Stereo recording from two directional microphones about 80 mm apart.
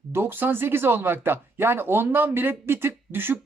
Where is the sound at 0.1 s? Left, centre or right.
Right.